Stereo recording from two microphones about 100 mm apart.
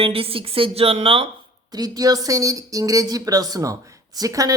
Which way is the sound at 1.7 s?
40° right (ahead or behind).